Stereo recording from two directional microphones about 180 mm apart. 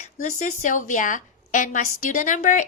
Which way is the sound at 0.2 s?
40° left (ahead or behind).